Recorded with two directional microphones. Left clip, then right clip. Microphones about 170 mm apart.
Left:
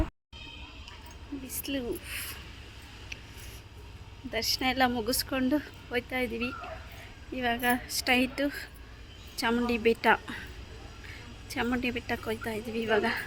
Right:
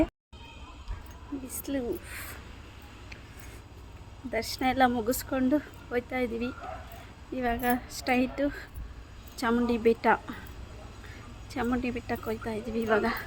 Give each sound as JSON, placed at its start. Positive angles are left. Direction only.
{"t": 1.5, "sound": "speech", "side_deg": -15}
{"t": 4.3, "sound": "speech", "side_deg": -20}
{"t": 11.4, "sound": "speech", "side_deg": -5}